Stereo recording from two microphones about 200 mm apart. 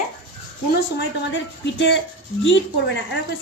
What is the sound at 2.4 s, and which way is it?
Speech, 65° left (ahead or behind).